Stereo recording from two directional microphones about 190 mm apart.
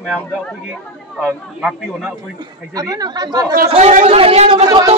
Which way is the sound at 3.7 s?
35° right (ahead or behind).